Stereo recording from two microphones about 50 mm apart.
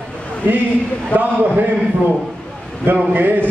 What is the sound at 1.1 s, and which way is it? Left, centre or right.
Speech, right.